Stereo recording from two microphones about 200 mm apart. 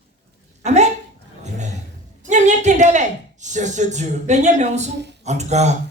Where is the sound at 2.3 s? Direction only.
35° right (ahead or behind).